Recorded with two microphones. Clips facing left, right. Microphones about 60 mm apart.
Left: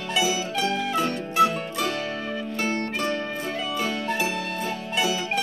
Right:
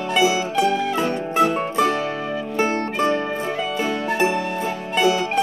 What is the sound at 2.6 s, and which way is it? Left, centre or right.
Music, right.